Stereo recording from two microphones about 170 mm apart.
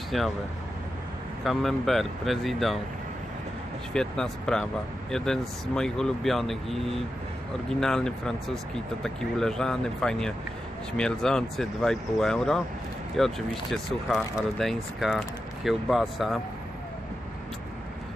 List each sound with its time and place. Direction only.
0.1 s speech: centre (ahead or behind)
1.4 s speech: centre (ahead or behind)
3.9 s speech: 5° left (ahead or behind)